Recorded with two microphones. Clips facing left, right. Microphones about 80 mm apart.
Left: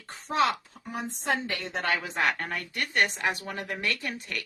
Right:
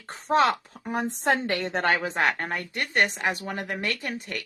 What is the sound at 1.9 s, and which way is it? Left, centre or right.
A woman's voice, right.